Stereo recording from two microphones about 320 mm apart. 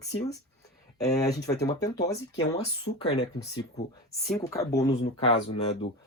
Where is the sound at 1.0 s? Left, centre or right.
Centre.